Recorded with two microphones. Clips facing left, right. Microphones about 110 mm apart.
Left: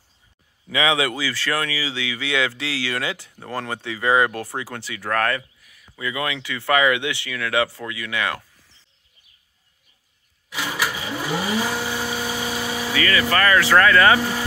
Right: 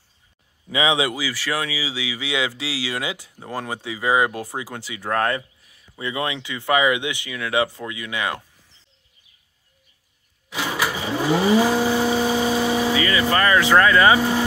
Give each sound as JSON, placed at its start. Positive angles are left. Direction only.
{"t": 0.7, "sound": "speech", "side_deg": -20}
{"t": 10.5, "sound": "vehicle", "side_deg": -20}